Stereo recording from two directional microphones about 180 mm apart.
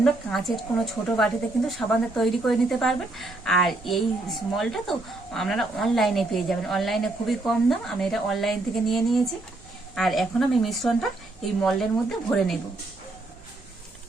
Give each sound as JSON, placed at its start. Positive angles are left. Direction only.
{"t": 0.0, "sound": "speech", "side_deg": 0}